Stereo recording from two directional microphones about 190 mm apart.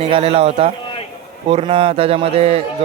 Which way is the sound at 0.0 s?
30° right (ahead or behind).